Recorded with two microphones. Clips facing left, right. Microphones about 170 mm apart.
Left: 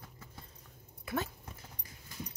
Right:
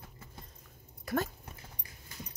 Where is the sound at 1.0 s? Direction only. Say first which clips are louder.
Right 4 dB; 45° right (ahead or behind).